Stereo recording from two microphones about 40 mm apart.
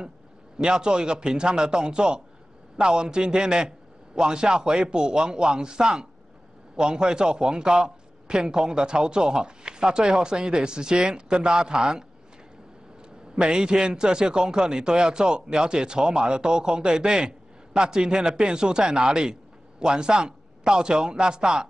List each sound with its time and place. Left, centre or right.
0.6 s a man's voice: centre
13.4 s a man's voice: right